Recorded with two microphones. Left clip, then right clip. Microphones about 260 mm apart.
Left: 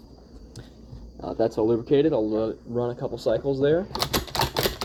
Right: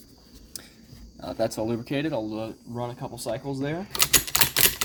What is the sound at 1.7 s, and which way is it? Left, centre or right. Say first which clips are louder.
Speech: left 8 dB; right.